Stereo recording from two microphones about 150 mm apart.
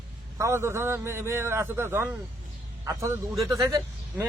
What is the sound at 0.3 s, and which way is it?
A man's voice, 20° right (ahead or behind).